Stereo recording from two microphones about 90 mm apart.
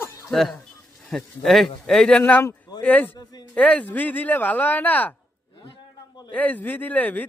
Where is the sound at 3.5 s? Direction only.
15° left (ahead or behind).